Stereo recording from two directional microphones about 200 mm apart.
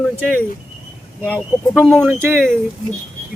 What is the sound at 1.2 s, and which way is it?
Speech, 5° right (ahead or behind).